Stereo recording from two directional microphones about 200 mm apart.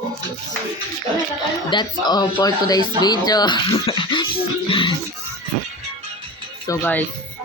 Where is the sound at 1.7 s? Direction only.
20° left (ahead or behind).